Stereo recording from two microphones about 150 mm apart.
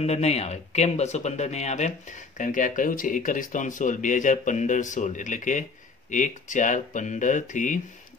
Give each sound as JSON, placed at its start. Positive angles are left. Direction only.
{"t": 0.0, "sound": "speech", "side_deg": 45}